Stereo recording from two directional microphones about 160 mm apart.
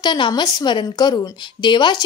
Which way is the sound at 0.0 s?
30° left (ahead or behind).